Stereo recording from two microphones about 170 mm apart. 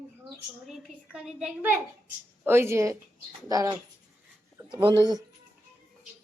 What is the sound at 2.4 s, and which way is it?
Speech, 15° right (ahead or behind).